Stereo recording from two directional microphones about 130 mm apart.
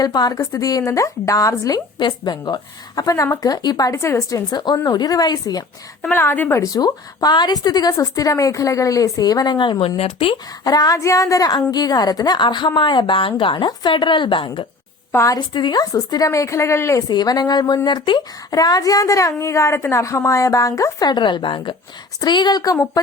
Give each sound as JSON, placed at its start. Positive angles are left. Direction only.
{"t": 0.0, "sound": "speech", "side_deg": 30}
{"t": 6.0, "sound": "a woman's voice", "side_deg": 15}
{"t": 6.6, "sound": "speech", "side_deg": 30}
{"t": 10.0, "sound": "speech", "side_deg": 50}
{"t": 10.3, "sound": "a woman's voice", "side_deg": 30}
{"t": 15.1, "sound": "speech", "side_deg": 25}
{"t": 17.1, "sound": "a woman's voice", "side_deg": 30}